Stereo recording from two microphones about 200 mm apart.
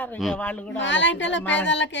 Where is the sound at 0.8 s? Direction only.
65° left (ahead or behind).